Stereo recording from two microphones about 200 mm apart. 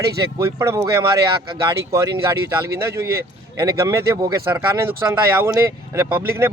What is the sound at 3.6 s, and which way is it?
Speech, 15° right (ahead or behind).